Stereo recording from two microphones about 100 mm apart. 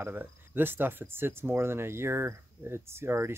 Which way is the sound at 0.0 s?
20° right (ahead or behind).